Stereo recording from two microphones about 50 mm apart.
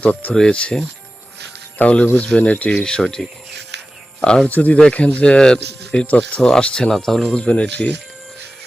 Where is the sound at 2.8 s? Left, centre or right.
Centre.